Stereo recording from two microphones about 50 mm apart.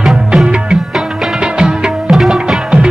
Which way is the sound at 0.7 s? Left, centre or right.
Centre.